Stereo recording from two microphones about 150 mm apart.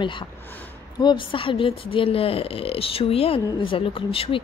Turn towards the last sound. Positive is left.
turn(degrees=40)  # may be behind; listen again after turning